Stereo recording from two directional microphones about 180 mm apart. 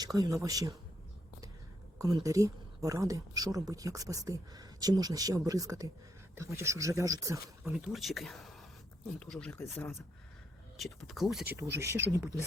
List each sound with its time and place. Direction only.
0.0 s speech: 20° right (ahead or behind)
2.0 s speech: 20° right (ahead or behind)
7.6 s speech: 5° right (ahead or behind)
10.8 s speech: centre (ahead or behind)
11.5 s speech: 15° right (ahead or behind)